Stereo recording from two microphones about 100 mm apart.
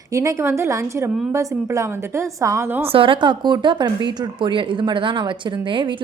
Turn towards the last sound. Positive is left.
turn(degrees=-55)  # may be behind; listen again after turning